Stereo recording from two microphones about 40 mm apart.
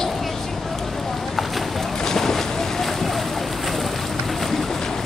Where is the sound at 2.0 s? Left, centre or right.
Centre.